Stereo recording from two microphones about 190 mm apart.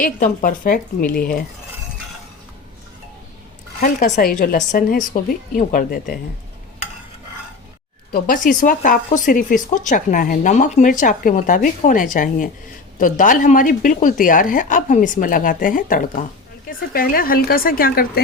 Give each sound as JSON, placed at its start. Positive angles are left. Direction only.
{"t": 0.0, "sound": "speech", "side_deg": 45}
{"t": 3.8, "sound": "speech", "side_deg": 45}
{"t": 8.1, "sound": "speech", "side_deg": 45}